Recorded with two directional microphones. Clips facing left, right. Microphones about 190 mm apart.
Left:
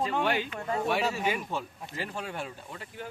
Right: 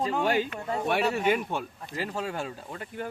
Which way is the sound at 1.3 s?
60° right (ahead or behind).